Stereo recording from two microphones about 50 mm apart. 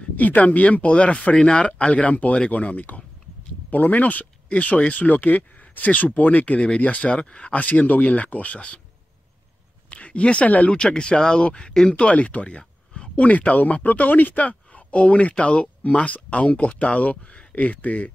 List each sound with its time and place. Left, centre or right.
0.1 s speech: left
7.6 s speech: left
9.8 s speech: left
10.7 s speech: centre
11.9 s speech: left